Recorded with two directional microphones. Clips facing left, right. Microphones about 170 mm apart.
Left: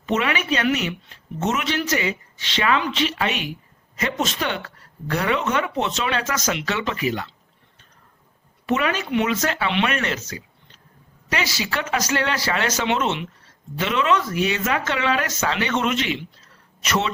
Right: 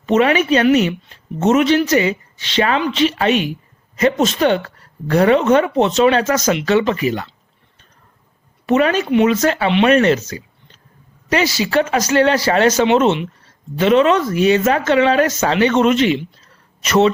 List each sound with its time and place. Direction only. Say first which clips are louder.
0.0 s a woman's voice: right 9 dB; 35° right (ahead or behind)
8.6 s a woman's voice: right 8 dB; 40° right (ahead or behind)
9.6 s a woman's voice: right 13 dB; 30° right (ahead or behind)